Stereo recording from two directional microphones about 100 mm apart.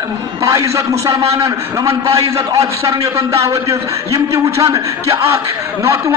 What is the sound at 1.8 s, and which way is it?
Speech, 70° right (ahead or behind).